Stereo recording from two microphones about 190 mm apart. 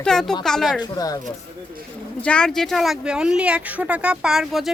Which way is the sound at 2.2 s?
5° left (ahead or behind).